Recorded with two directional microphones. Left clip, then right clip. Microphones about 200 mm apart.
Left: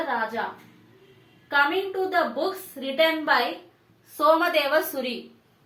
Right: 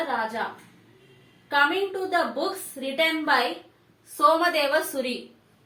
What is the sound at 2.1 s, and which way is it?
A woman's voice, 15° left (ahead or behind).